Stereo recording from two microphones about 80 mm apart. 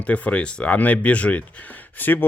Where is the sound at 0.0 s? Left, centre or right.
Centre.